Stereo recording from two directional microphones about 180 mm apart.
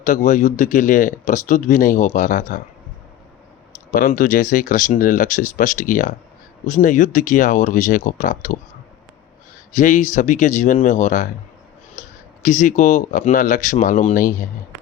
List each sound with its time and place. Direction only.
0.0 s speech: 40° left (ahead or behind)
3.9 s speech: 50° left (ahead or behind)
9.7 s speech: 45° left (ahead or behind)